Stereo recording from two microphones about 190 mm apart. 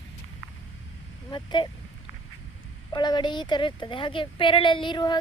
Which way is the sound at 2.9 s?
25° left (ahead or behind).